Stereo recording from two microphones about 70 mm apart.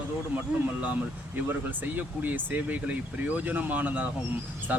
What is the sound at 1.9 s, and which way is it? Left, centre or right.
Speech, right.